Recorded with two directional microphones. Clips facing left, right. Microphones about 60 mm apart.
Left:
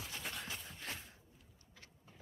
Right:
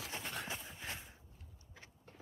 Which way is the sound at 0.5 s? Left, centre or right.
Centre.